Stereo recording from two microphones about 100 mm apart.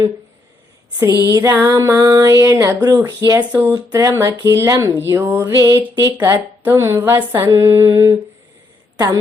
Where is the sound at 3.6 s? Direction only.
15° right (ahead or behind).